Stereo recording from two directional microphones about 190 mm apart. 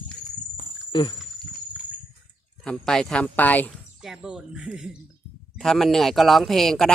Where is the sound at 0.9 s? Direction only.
25° left (ahead or behind).